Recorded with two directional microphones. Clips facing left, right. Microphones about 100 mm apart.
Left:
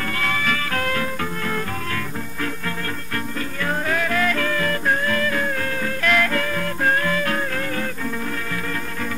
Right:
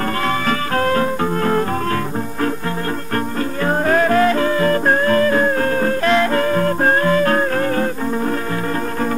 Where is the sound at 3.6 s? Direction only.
40° right (ahead or behind).